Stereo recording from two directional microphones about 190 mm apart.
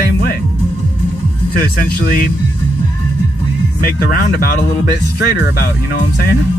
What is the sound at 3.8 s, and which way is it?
Speech, 50° left (ahead or behind).